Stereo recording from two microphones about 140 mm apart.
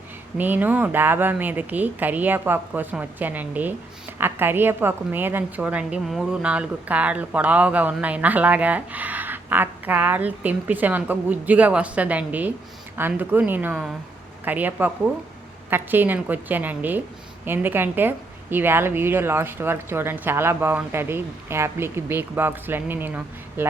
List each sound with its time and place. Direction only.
0.3 s a woman's voice: 15° right (ahead or behind)